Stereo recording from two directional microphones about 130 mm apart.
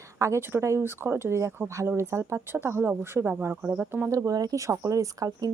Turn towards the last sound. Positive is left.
turn(degrees=-30)  # may be behind; listen again after turning